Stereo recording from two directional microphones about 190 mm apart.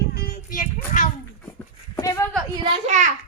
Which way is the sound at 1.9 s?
15° left (ahead or behind).